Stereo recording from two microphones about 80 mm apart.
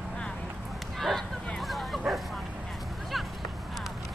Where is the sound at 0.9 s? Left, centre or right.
Centre.